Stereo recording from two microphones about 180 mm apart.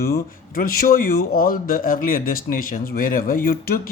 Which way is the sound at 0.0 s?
55° left (ahead or behind).